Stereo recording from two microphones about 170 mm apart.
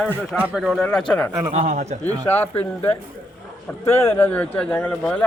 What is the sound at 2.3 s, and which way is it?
A man's voice, 10° left (ahead or behind).